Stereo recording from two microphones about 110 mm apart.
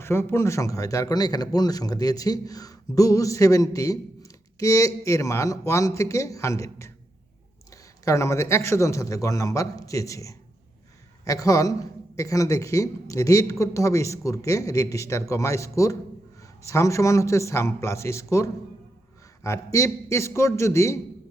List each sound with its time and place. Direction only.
0.0 s a man's voice: 25° left (ahead or behind)
8.0 s a man's voice: 30° left (ahead or behind)